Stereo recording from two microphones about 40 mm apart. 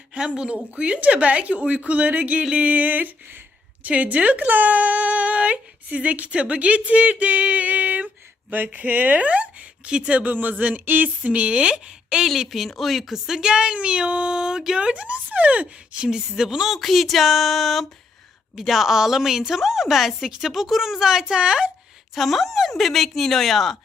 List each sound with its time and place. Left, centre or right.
0.1 s speech: right
2.6 s a sound: right
3.8 s speech: right
6.3 s speech: right
10.2 s a sound: right
11.2 s speech: right
12.4 s speech: centre
13.5 s speech: right
14.8 s speech: right
16.0 s a woman's voice: centre
22.1 s speech: centre